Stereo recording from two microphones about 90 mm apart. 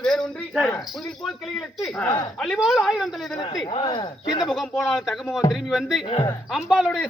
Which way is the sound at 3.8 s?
50° left (ahead or behind).